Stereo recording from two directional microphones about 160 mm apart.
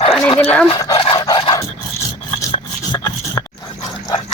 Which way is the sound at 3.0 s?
20° left (ahead or behind).